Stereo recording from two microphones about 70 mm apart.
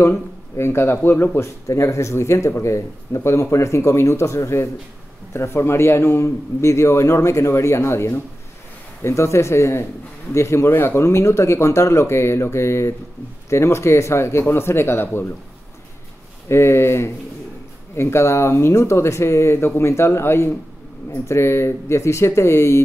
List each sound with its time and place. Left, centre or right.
0.0 s a man's voice: left
1.7 s a man's voice: left
16.4 s a man's voice: left